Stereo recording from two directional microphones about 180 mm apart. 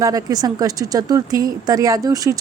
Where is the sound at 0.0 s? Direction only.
20° right (ahead or behind).